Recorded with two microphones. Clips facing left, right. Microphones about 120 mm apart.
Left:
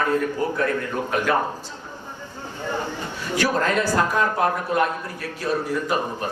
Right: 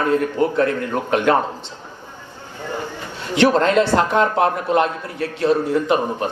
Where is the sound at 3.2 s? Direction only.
25° right (ahead or behind).